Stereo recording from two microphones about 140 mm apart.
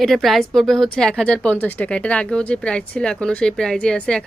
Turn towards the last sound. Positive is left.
turn(degrees=5)  # may be behind; listen again after turning